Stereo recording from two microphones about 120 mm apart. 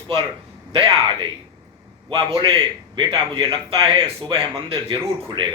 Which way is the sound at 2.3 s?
45° right (ahead or behind).